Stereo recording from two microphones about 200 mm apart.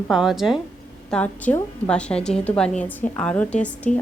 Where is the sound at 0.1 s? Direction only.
Centre (ahead or behind).